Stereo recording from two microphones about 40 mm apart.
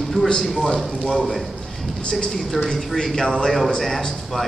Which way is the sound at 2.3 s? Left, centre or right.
Centre.